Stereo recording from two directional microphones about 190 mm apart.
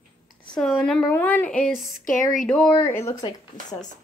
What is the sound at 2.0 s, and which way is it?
Speech, 45° left (ahead or behind).